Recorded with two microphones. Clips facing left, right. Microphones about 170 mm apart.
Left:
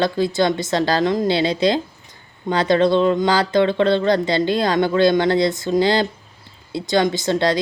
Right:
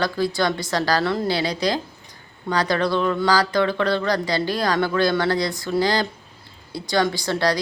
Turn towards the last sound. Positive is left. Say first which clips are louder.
# left 3 dB
turn(degrees=20)  # may be behind; listen again after turning